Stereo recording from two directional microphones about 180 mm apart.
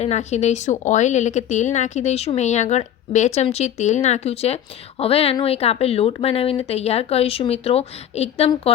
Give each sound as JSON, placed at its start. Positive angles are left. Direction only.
{"t": 0.0, "sound": "a woman's voice", "side_deg": 40}